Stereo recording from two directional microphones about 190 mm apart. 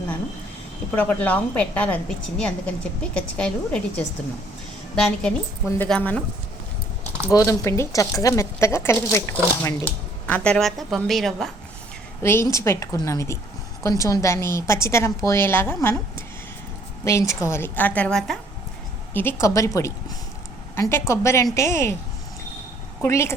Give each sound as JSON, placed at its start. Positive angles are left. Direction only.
{"t": 0.9, "sound": "speech", "side_deg": 10}
{"t": 5.2, "sound": "a woman's voice", "side_deg": 5}
{"t": 7.3, "sound": "speech", "side_deg": 15}
{"t": 12.2, "sound": "speech", "side_deg": 15}
{"t": 23.0, "sound": "speech", "side_deg": 15}